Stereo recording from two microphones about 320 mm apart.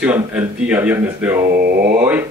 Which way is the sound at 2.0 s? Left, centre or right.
Centre.